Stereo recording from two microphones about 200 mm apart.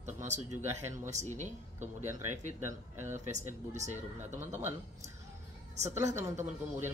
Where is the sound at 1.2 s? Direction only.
35° right (ahead or behind).